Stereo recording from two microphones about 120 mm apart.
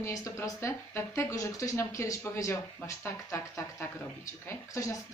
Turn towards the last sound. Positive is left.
turn(degrees=25)  # may be behind; listen again after turning